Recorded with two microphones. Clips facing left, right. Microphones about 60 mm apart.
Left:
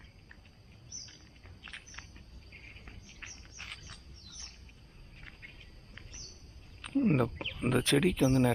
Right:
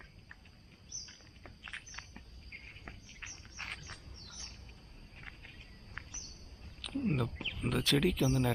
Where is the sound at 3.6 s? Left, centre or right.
Right.